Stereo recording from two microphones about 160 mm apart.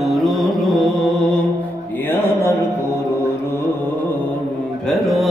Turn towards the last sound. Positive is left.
turn(degrees=0)  # may be behind; listen again after turning